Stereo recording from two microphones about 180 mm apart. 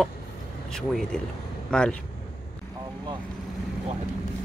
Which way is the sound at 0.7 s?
5° left (ahead or behind).